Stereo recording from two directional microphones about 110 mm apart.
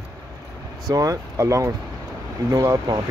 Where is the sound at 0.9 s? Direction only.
30° right (ahead or behind).